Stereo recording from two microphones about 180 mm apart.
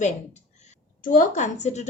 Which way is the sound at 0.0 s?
40° left (ahead or behind).